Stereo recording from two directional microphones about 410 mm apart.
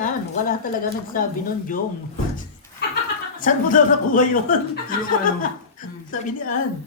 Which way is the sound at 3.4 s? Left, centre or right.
Centre.